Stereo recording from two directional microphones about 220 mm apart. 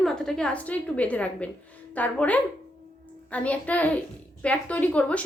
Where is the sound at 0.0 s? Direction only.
5° left (ahead or behind).